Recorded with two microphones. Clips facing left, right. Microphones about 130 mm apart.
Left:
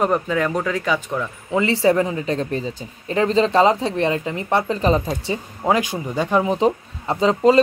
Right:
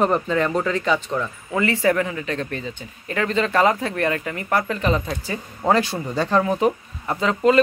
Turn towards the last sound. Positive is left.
turn(degrees=30)  # may be behind; listen again after turning